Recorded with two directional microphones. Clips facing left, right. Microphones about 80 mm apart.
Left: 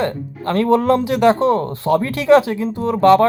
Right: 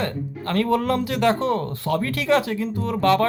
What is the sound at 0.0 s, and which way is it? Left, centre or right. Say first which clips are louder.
Speech: left 5 dB; left.